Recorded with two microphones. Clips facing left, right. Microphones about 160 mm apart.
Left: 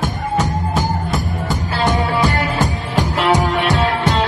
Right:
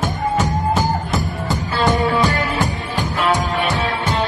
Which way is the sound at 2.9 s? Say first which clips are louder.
Left 3 dB; 85° left.